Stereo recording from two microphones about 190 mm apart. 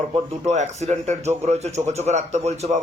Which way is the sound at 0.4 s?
35° right (ahead or behind).